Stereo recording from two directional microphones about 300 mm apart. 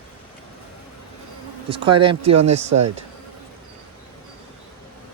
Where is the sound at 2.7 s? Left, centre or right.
Right.